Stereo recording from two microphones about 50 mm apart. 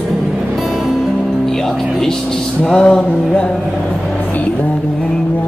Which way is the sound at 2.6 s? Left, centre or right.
Centre.